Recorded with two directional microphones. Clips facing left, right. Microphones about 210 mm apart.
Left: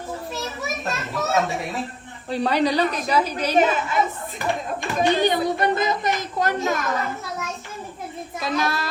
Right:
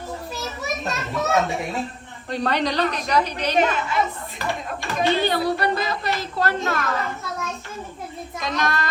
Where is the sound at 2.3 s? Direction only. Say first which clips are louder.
Left 2 dB; 10° left (ahead or behind).